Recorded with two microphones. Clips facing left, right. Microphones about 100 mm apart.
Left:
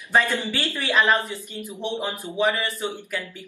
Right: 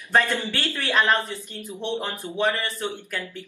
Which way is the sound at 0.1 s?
15° left (ahead or behind).